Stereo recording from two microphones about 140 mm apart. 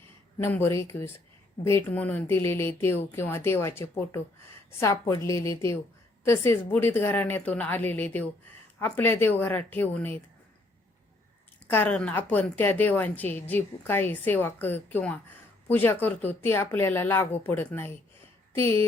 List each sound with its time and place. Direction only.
0.3 s a woman's voice: 15° left (ahead or behind)
11.7 s a woman's voice: 10° left (ahead or behind)